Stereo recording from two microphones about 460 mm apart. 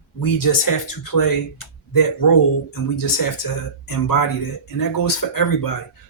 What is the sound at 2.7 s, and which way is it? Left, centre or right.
Speech, left.